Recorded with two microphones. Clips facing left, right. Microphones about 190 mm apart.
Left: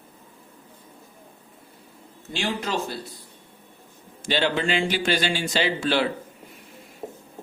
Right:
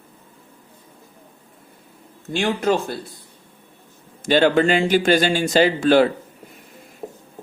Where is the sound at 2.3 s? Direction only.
50° right (ahead or behind).